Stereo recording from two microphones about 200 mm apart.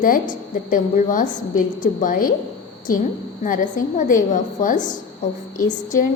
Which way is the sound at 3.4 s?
40° left (ahead or behind).